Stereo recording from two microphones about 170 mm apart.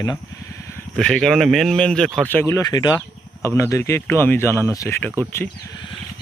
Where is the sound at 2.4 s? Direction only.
20° left (ahead or behind).